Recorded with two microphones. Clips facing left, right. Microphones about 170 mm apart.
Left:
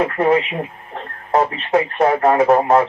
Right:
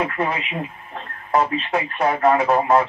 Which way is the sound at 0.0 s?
45° left (ahead or behind).